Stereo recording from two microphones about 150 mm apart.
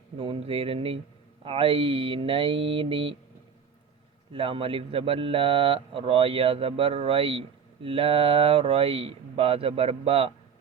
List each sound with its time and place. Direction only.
0.2 s speech: 35° right (ahead or behind)
4.3 s speech: 35° right (ahead or behind)